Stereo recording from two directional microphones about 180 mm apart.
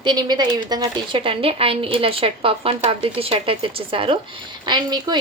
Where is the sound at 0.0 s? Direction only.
25° right (ahead or behind).